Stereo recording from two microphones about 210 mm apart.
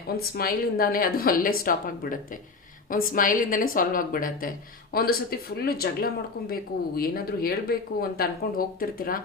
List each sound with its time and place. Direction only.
0.2 s a woman's voice: 45° left (ahead or behind)